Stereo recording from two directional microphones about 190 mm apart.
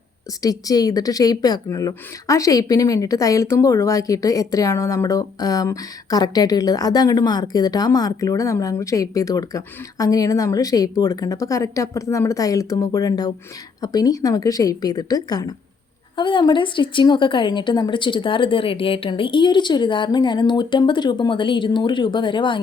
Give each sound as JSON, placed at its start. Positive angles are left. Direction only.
{"t": 0.4, "sound": "speech", "side_deg": 20}